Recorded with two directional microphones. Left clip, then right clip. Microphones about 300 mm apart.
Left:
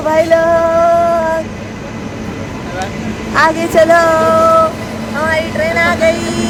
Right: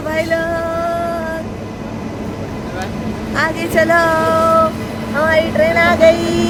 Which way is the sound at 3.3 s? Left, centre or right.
Centre.